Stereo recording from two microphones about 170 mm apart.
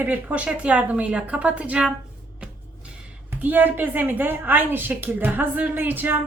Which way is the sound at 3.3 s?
10° right (ahead or behind).